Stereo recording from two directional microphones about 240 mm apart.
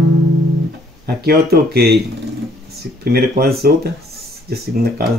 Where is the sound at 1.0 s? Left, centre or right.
Right.